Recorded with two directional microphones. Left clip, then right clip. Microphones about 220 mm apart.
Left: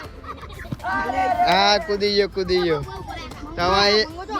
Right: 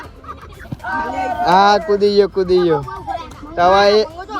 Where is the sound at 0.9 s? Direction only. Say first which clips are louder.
Right 1 dB; 40° left (ahead or behind).